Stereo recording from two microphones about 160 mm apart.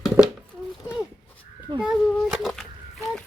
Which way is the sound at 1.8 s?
Centre (ahead or behind).